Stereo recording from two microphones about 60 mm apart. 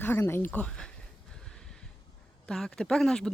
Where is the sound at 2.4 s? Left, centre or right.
Centre.